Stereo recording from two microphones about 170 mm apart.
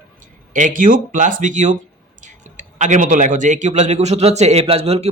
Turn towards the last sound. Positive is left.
turn(degrees=-35)  # may be behind; listen again after turning